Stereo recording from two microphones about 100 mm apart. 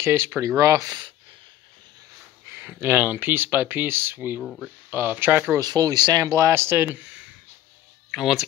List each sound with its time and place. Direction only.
0.0 s speech: 25° right (ahead or behind); by 1.1 s 45° right (ahead or behind)
2.5 s speech: 20° right (ahead or behind)
4.4 s speech: 5° left (ahead or behind)
4.9 s speech: 20° right (ahead or behind)
5.6 s speech: 40° right (ahead or behind)
6.2 s speech: 30° right (ahead or behind)
8.1 s speech: 5° right (ahead or behind)